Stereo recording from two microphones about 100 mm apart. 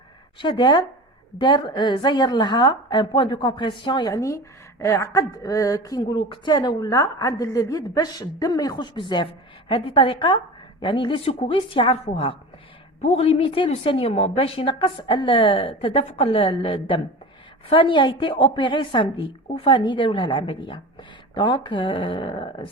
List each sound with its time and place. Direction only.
0.3 s a woman's voice: 55° left (ahead or behind)
4.1 s speech: 30° left (ahead or behind)
9.0 s a woman's voice: 55° left (ahead or behind)
11.3 s a woman's voice: 75° left (ahead or behind)
13.0 s a woman's voice: 90° left; by 22.6 s 55° left (ahead or behind)